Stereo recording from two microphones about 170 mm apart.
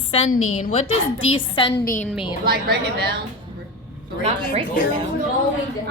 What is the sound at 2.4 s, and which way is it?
Speech, 70° right (ahead or behind).